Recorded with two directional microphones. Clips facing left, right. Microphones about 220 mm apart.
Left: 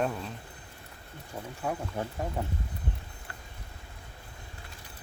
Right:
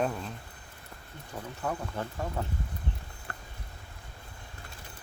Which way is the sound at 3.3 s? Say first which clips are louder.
Right 4 dB; 55° right (ahead or behind).